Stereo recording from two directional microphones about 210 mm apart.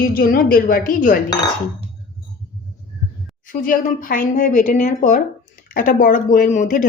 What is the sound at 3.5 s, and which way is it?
A woman's voice, 40° left (ahead or behind).